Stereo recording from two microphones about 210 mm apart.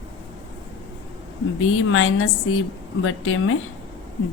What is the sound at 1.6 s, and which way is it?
A woman's voice, 75° left (ahead or behind).